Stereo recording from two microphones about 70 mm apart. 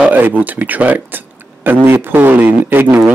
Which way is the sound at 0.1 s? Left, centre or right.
Right.